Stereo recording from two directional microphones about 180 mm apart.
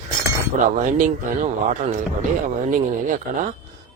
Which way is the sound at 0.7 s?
45° right (ahead or behind).